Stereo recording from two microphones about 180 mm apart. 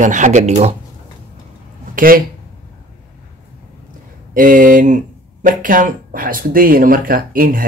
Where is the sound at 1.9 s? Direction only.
50° right (ahead or behind).